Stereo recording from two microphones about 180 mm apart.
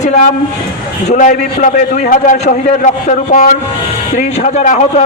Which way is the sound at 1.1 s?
45° left (ahead or behind).